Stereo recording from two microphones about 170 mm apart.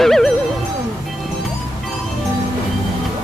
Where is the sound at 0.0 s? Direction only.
Centre (ahead or behind).